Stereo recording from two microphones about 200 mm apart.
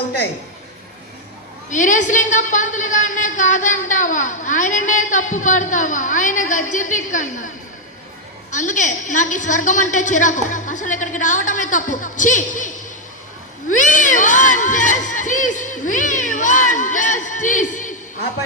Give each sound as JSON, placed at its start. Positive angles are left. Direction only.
{"t": 1.7, "sound": "a woman's voice", "side_deg": 40}
{"t": 13.7, "sound": "crowd", "side_deg": 40}